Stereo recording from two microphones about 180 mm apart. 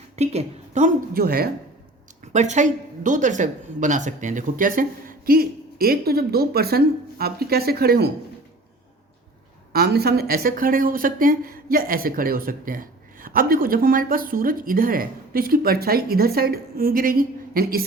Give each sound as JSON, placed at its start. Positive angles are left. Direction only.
{"t": 0.2, "sound": "a woman's voice", "side_deg": -35}
{"t": 1.2, "sound": "speech", "side_deg": -55}
{"t": 2.3, "sound": "speech", "side_deg": -40}
{"t": 9.7, "sound": "speech", "side_deg": -60}